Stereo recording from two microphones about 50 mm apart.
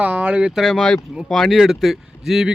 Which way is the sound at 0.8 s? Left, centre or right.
Centre.